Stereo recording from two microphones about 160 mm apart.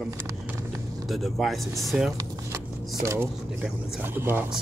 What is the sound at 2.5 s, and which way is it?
Shuffling cards, 20° right (ahead or behind).